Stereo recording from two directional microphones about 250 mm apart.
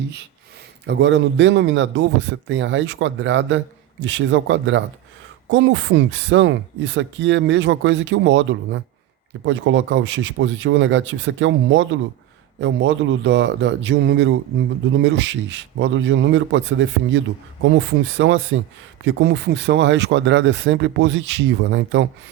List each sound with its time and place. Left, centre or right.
0.9 s a man's voice: right